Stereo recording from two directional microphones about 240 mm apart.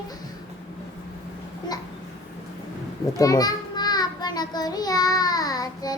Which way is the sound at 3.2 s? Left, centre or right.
Centre.